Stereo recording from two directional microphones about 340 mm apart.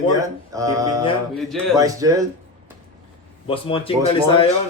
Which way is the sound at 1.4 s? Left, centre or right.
Centre.